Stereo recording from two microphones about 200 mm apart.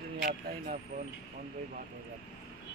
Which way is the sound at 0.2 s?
50° right (ahead or behind).